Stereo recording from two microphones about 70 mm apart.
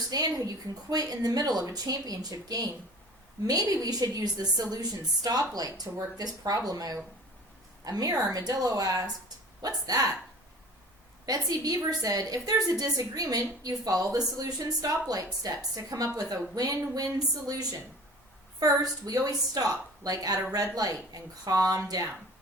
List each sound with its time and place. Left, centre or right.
0.1 s a woman's voice: right
11.3 s a woman's voice: right